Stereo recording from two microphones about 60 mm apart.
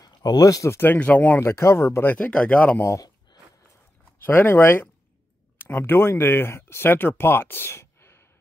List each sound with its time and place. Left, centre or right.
0.0 s speech: left
0.8 s speech: left
1.4 s speech: left
2.1 s speech: left
4.2 s speech: left